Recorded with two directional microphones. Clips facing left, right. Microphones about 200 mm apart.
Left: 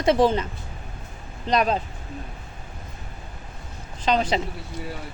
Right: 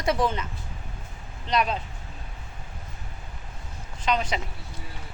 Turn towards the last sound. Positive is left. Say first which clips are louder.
# left 4 dB
turn(degrees=30)  # may be behind; listen again after turning